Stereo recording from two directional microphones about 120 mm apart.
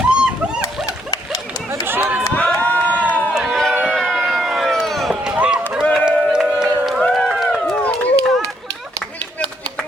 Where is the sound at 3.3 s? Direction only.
Centre (ahead or behind).